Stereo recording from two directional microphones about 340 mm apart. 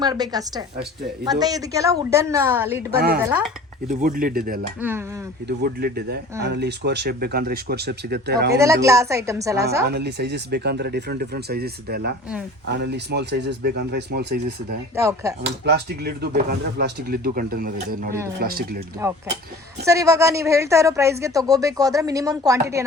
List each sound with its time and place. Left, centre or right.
0.0 s speech: centre
3.8 s speech: right
4.8 s speech: centre
5.5 s speech: right
8.5 s speech: centre
9.8 s speech: right
14.9 s speech: centre
15.4 s speech: right
19.0 s speech: centre